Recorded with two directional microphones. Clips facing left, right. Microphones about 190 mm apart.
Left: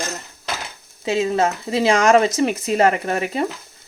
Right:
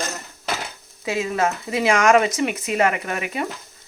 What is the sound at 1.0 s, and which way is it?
Speech, 30° left (ahead or behind).